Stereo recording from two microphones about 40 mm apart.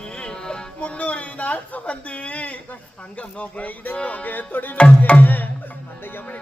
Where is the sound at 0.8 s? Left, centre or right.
Left.